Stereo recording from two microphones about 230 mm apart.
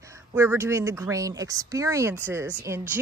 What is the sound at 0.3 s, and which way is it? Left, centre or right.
A woman's voice, centre.